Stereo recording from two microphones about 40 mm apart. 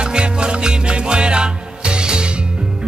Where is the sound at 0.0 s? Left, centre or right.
Right.